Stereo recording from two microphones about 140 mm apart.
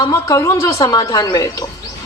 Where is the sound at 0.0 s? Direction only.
25° left (ahead or behind).